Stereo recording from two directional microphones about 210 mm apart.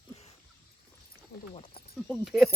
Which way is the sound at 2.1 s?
Centre (ahead or behind).